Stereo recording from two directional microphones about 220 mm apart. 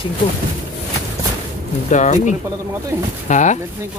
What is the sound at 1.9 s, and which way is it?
Speech, 35° left (ahead or behind).